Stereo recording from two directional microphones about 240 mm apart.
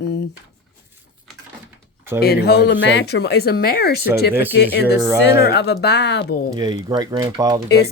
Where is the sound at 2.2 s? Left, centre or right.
Left.